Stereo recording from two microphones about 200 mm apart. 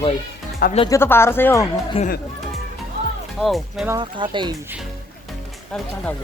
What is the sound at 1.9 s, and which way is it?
Speech, 30° left (ahead or behind).